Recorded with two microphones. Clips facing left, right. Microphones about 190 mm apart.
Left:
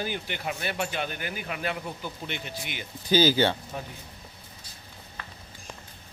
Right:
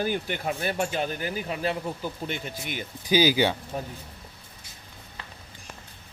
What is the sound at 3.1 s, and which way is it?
Speech, 10° right (ahead or behind).